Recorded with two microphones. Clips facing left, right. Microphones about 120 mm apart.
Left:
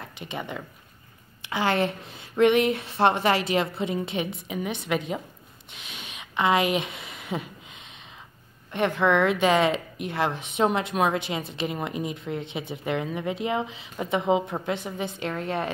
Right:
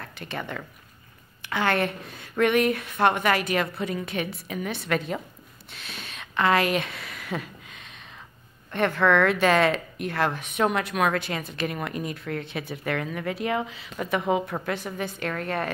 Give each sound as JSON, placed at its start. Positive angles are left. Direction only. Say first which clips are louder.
{"t": 0.0, "sound": "a woman's voice", "louder": "even", "side_deg": 20}
{"t": 5.7, "sound": "a sound", "louder": "right 1 dB", "side_deg": 15}
{"t": 8.7, "sound": "a woman's voice", "louder": "right 1 dB", "side_deg": 15}